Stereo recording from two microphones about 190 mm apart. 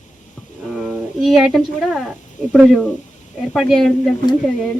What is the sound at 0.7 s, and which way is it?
Speech, centre (ahead or behind).